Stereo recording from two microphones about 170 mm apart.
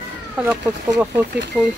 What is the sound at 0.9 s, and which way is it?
Speech, 10° right (ahead or behind).